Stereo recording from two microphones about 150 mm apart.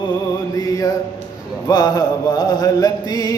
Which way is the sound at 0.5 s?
25° left (ahead or behind).